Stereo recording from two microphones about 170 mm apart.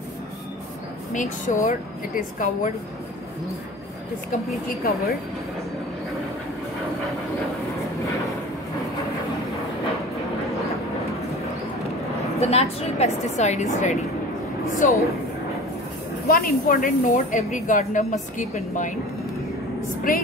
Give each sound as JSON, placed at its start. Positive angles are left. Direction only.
{"t": 1.1, "sound": "a woman's voice", "side_deg": 50}
{"t": 4.6, "sound": "a woman's voice", "side_deg": 65}
{"t": 12.4, "sound": "a woman's voice", "side_deg": 40}
{"t": 16.3, "sound": "a woman's voice", "side_deg": 55}
{"t": 20.1, "sound": "a woman's voice", "side_deg": 55}